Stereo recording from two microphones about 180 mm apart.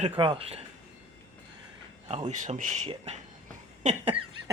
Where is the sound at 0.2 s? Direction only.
30° right (ahead or behind).